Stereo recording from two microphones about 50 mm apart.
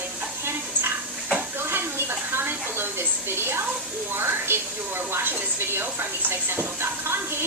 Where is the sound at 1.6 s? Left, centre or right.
Right.